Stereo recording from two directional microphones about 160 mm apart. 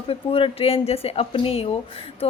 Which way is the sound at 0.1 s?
35° left (ahead or behind).